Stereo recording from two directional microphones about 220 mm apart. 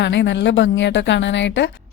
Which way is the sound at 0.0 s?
55° left (ahead or behind).